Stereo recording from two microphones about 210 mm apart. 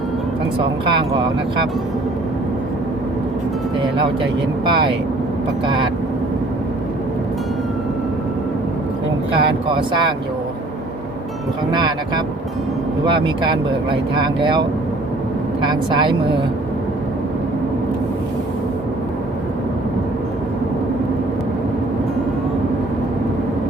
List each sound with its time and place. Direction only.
0.6 s speech: 25° right (ahead or behind)
4.7 s speech: 25° right (ahead or behind)
9.3 s speech: 25° right (ahead or behind)
11.7 s speech: 20° right (ahead or behind)